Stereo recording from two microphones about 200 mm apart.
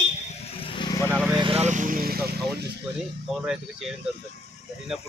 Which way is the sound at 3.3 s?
Centre (ahead or behind).